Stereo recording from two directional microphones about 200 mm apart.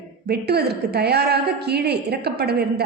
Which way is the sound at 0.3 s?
55° right (ahead or behind).